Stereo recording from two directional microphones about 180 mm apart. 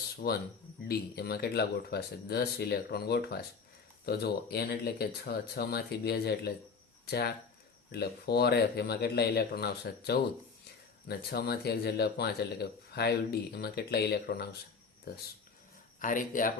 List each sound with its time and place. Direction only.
0.2 s speech: 55° left (ahead or behind)
16.0 s speech: 45° left (ahead or behind)